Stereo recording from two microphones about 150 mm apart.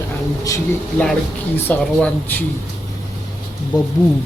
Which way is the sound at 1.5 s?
10° left (ahead or behind).